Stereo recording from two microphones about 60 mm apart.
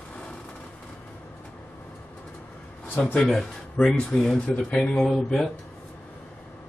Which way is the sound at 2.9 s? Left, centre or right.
Left.